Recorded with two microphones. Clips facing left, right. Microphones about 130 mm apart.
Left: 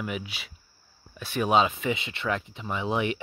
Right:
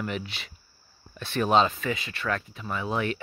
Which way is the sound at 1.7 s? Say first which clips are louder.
Left 2 dB; 20° left (ahead or behind).